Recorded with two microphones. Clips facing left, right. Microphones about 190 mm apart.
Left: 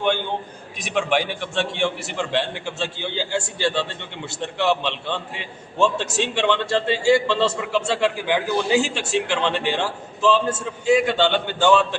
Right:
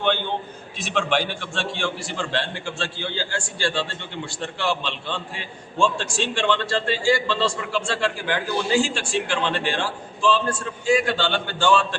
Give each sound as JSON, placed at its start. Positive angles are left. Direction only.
{"t": 0.8, "sound": "a man's voice", "side_deg": 15}